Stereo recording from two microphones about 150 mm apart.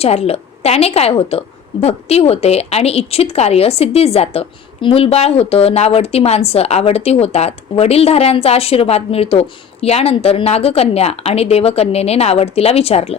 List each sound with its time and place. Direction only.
0.0 s a woman's voice: 45° left (ahead or behind)